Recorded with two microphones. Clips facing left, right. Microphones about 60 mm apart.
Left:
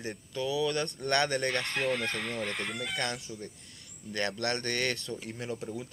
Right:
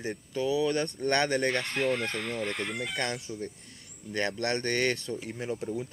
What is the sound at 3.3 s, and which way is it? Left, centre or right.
Speech, right.